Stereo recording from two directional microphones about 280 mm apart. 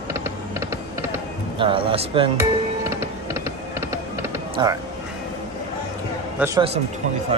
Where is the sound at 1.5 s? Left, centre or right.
Centre.